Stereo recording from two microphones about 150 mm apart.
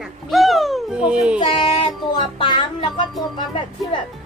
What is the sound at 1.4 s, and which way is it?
Music, 35° left (ahead or behind).